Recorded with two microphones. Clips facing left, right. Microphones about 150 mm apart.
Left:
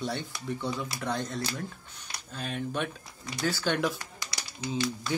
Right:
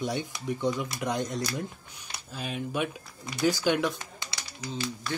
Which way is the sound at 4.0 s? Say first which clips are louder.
Even; 25° right (ahead or behind).